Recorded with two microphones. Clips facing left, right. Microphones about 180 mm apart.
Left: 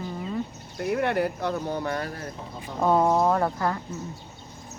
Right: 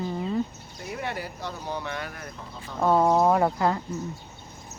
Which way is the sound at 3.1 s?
10° right (ahead or behind).